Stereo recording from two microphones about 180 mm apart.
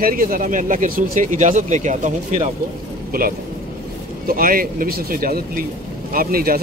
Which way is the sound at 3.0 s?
55° right (ahead or behind).